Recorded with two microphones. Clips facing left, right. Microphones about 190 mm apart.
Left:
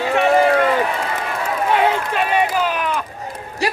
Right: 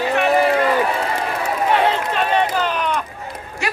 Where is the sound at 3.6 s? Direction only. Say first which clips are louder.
Left 4 dB; 35° left (ahead or behind).